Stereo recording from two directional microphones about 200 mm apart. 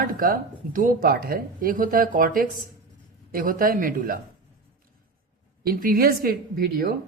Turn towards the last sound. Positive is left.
turn(degrees=-50)  # may be behind; listen again after turning